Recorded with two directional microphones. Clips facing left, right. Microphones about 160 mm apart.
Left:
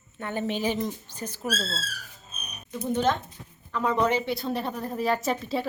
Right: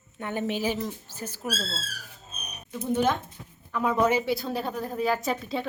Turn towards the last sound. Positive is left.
turn(degrees=0)  # may be behind; listen again after turning